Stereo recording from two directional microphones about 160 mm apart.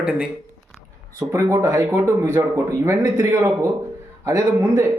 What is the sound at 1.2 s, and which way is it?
A man's voice, 15° right (ahead or behind).